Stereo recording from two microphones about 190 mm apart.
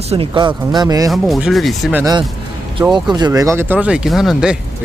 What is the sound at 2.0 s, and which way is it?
Speech, 20° right (ahead or behind).